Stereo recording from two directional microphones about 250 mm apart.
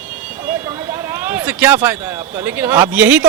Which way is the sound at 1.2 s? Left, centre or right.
Centre.